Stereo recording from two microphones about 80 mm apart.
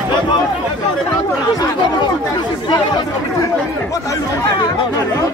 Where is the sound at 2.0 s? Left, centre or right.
Left.